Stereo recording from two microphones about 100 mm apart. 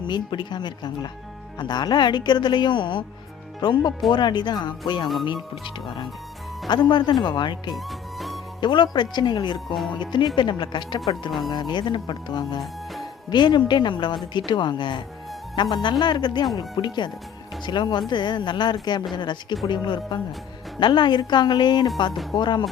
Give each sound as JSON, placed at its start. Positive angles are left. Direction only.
{"t": 0.1, "sound": "speech", "side_deg": 50}
{"t": 7.9, "sound": "music", "side_deg": 0}
{"t": 8.6, "sound": "speech", "side_deg": 50}
{"t": 11.3, "sound": "speech", "side_deg": 0}
{"t": 11.5, "sound": "speech", "side_deg": 50}
{"t": 12.5, "sound": "speech", "side_deg": 0}
{"t": 13.3, "sound": "speech", "side_deg": 50}